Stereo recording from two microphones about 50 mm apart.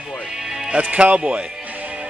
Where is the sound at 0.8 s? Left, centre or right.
Right.